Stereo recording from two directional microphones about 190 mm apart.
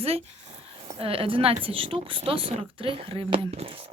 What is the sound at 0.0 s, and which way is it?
Speech, 30° right (ahead or behind).